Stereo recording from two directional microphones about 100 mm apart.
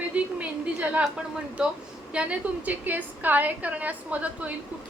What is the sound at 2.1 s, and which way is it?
A woman's voice, 15° right (ahead or behind).